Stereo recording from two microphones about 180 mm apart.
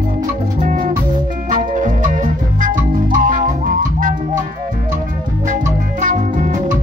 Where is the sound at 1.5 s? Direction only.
45° right (ahead or behind).